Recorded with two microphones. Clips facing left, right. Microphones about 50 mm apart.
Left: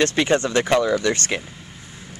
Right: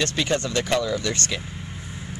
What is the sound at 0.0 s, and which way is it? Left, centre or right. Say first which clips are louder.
Speech: left 5 dB; left.